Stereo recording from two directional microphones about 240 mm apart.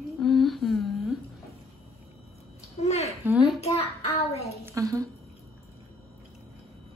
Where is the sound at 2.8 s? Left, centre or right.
Left.